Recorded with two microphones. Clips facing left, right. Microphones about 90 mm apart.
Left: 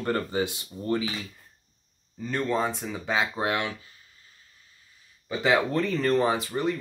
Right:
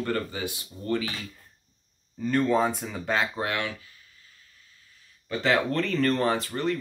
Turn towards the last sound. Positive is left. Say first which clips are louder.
# even
turn(degrees=10)  # may be behind; listen again after turning